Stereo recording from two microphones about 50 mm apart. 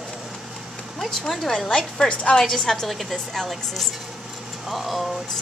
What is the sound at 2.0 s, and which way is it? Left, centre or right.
Speech, left.